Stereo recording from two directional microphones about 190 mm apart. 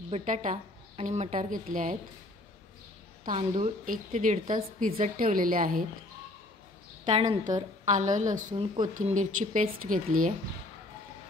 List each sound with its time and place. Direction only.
0.1 s a woman's voice: 40° right (ahead or behind)
3.3 s a woman's voice: 35° right (ahead or behind)
7.1 s speech: 25° right (ahead or behind)
7.8 s a woman's voice: 40° right (ahead or behind)
8.5 s speech: 25° right (ahead or behind)
9.0 s a woman's voice: 40° right (ahead or behind)